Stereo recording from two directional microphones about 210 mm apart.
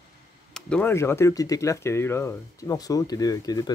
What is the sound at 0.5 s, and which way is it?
Speech, 5° left (ahead or behind).